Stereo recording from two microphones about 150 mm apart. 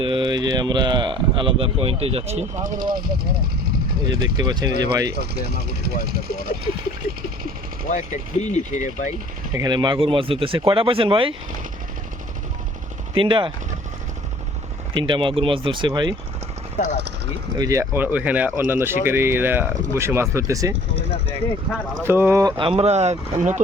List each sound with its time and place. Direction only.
0.0 s speech: 35° right (ahead or behind); by 3.8 s 90° right
3.9 s speech: 25° right (ahead or behind)
5.1 s speech: 90° right
7.9 s speech: 50° left (ahead or behind)
9.6 s speech: 30° right (ahead or behind)
13.1 s speech: 35° right (ahead or behind)
15.0 s speech: 35° right (ahead or behind)
17.6 s speech: 20° right (ahead or behind)
22.0 s speech: 15° right (ahead or behind)
22.5 s speech: 40° right (ahead or behind)